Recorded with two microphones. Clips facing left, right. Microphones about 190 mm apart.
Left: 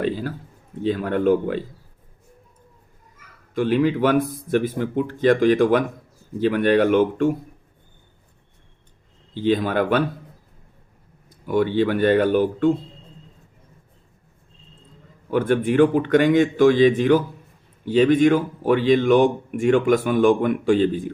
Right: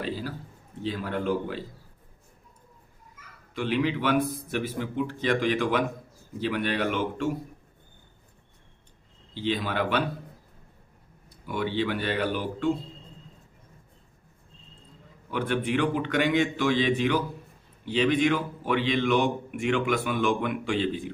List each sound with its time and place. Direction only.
0.0 s a sound: 50° left (ahead or behind)
0.8 s a man's voice: 50° left (ahead or behind)
3.5 s a man's voice: 45° left (ahead or behind)
9.3 s a man's voice: 50° left (ahead or behind)
11.3 s a man's voice: 50° left (ahead or behind)
15.3 s a man's voice: 45° left (ahead or behind)